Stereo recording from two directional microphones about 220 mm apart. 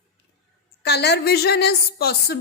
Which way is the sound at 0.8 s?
50° left (ahead or behind).